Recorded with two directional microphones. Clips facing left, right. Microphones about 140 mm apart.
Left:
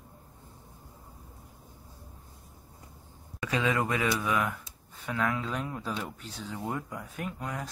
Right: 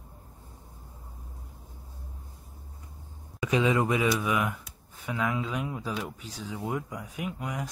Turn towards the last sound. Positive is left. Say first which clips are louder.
# right 2 dB
turn(degrees=-10)  # may be behind; listen again after turning